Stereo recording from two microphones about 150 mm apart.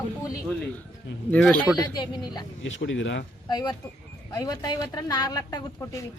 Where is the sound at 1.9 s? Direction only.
30° left (ahead or behind).